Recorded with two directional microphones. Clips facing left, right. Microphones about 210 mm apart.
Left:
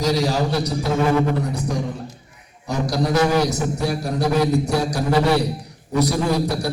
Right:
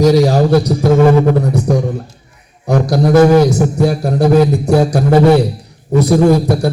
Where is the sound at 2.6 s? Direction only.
55° right (ahead or behind).